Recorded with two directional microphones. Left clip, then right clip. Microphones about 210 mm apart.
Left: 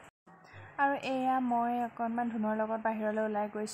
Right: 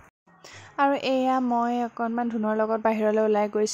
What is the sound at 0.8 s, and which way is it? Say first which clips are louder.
A woman's voice: right 8 dB; 30° right (ahead or behind).